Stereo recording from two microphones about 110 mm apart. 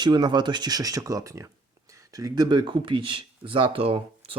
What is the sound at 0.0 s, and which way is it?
Speech, 40° right (ahead or behind).